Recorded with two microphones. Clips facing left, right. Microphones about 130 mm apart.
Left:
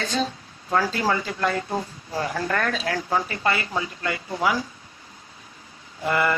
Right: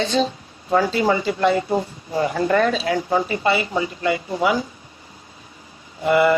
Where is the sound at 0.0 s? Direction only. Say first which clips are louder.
Right 6 dB; 25° right (ahead or behind).